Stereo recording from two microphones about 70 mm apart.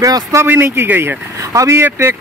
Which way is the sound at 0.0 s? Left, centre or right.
Right.